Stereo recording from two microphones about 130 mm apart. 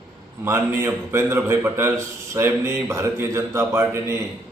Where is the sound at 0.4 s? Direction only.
20° right (ahead or behind).